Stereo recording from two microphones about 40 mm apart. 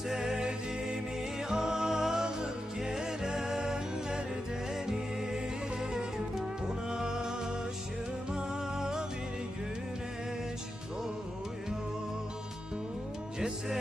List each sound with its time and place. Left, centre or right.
0.1 s music: centre
5.9 s music: centre